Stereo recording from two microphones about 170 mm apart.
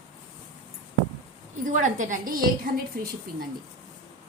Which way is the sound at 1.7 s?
45° right (ahead or behind).